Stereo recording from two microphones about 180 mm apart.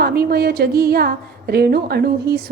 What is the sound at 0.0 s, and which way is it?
A woman's voice, 55° right (ahead or behind).